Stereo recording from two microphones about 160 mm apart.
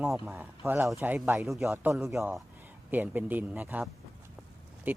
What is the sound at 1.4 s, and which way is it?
Speech, centre (ahead or behind).